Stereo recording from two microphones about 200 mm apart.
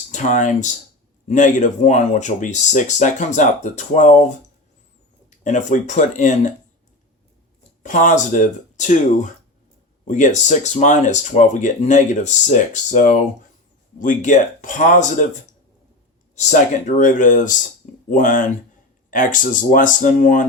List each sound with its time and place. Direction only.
0.1 s speech: 40° left (ahead or behind)
5.4 s speech: 40° left (ahead or behind)
7.8 s speech: 40° left (ahead or behind)